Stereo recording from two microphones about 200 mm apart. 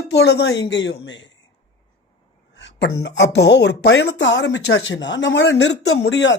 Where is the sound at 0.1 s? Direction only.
55° left (ahead or behind).